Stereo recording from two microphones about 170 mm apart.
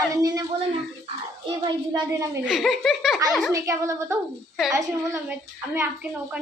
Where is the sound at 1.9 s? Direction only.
20° right (ahead or behind).